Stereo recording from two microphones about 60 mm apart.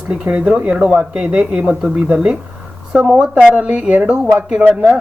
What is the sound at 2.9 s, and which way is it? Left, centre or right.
Speech, centre.